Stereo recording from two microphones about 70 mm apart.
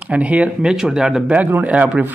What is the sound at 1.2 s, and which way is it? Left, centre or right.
Speech, right.